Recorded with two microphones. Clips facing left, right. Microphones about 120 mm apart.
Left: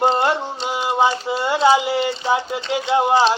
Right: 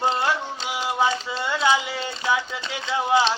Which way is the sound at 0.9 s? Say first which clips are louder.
Left 5 dB; 70° left (ahead or behind).